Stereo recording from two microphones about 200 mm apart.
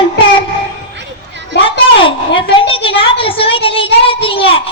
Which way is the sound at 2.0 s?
25° left (ahead or behind).